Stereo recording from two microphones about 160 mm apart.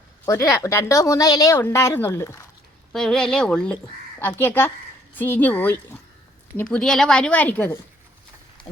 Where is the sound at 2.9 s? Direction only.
5° left (ahead or behind).